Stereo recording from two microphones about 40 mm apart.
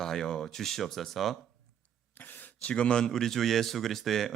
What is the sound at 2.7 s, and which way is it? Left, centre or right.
Speech, left.